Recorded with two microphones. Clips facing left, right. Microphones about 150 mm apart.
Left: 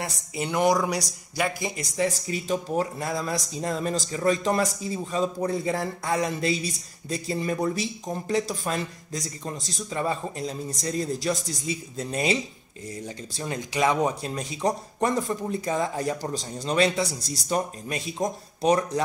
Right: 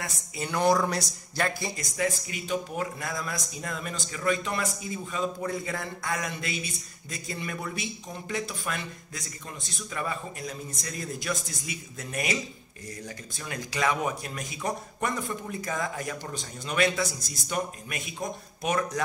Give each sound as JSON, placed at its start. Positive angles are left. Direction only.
{"t": 0.0, "sound": "speech", "side_deg": 20}
{"t": 1.8, "sound": "speech", "side_deg": 30}